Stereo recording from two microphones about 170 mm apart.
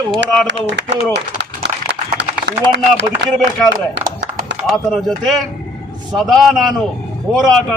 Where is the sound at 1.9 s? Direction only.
85° right.